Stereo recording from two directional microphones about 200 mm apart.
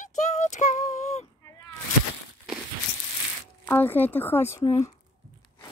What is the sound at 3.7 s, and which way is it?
Speech, 10° left (ahead or behind).